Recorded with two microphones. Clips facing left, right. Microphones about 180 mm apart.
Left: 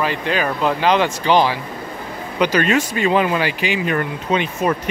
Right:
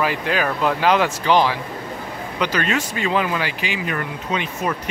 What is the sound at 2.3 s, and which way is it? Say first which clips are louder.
Speech: left 5 dB; 15° left (ahead or behind).